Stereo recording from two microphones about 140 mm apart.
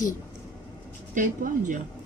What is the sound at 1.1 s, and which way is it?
Speech, 70° right (ahead or behind).